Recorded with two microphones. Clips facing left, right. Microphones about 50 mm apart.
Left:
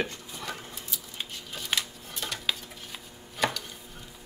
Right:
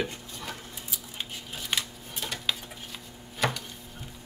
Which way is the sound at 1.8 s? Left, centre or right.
Centre.